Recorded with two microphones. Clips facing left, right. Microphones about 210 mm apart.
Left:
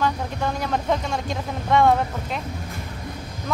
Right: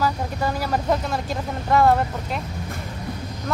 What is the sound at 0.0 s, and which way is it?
Speech, 5° right (ahead or behind).